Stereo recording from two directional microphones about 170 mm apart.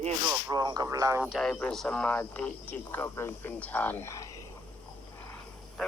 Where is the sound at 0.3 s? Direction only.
20° right (ahead or behind).